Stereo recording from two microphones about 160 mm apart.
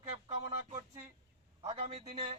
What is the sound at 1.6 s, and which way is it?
Speech, 40° right (ahead or behind).